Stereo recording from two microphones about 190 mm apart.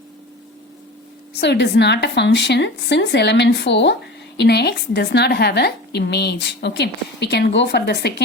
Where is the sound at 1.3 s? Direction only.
60° left (ahead or behind).